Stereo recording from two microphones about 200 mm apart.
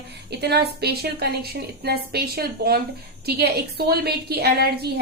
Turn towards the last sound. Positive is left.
turn(degrees=-55)  # may be behind; listen again after turning